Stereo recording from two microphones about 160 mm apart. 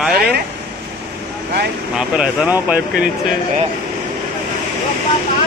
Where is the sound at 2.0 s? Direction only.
10° right (ahead or behind).